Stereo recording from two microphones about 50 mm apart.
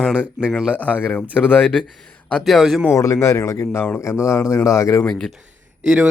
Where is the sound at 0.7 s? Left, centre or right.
Left.